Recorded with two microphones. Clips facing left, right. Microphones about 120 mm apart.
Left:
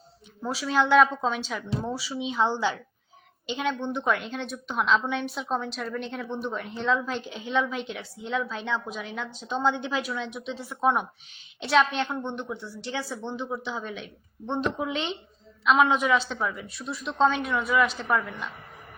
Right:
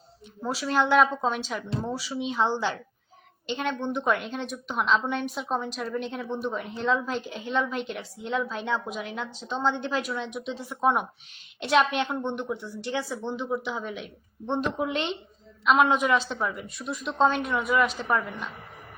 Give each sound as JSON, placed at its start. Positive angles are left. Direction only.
{"t": 0.4, "sound": "a woman's voice", "side_deg": -5}
{"t": 12.8, "sound": "a woman's voice", "side_deg": 0}